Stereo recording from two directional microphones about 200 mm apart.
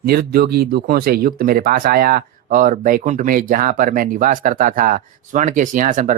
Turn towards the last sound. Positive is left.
turn(degrees=-40)  # may be behind; listen again after turning